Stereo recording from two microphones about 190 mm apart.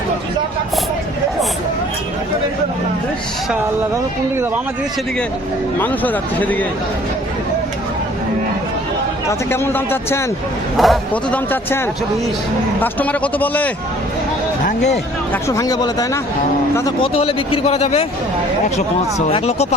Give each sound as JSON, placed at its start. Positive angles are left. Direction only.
{"t": 5.8, "sound": "speech", "side_deg": 10}
{"t": 9.5, "sound": "speech", "side_deg": 10}
{"t": 12.8, "sound": "speech", "side_deg": 10}
{"t": 15.3, "sound": "speech", "side_deg": 15}
{"t": 17.0, "sound": "speech", "side_deg": 30}
{"t": 19.3, "sound": "speech", "side_deg": 35}